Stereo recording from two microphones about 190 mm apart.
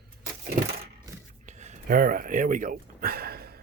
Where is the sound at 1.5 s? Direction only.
40° right (ahead or behind); by 3.6 s 55° right (ahead or behind).